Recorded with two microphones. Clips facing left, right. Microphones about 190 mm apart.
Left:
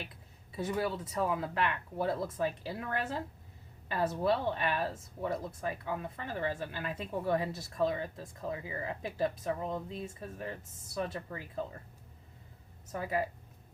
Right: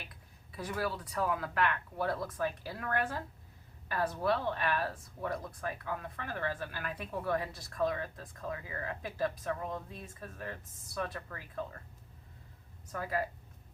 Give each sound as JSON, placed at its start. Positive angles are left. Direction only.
{"t": 0.5, "sound": "speech", "side_deg": 25}
{"t": 12.9, "sound": "speech", "side_deg": 20}